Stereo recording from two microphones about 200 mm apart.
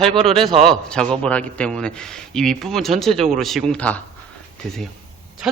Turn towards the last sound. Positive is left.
turn(degrees=-5)  # may be behind; listen again after turning